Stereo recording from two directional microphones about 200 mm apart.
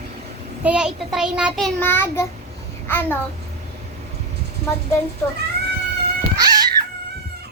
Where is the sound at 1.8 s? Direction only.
10° left (ahead or behind).